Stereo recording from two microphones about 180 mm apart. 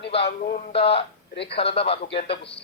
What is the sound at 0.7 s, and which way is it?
Speech, 30° left (ahead or behind).